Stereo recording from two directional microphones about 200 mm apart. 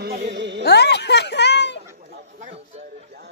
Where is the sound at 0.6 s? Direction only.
55° left (ahead or behind).